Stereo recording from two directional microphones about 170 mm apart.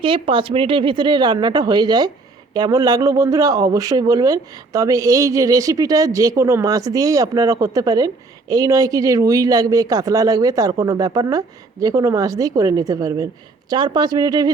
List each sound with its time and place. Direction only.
0.0 s speech: 30° right (ahead or behind)